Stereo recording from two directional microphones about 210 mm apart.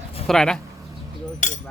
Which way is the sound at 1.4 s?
35° left (ahead or behind).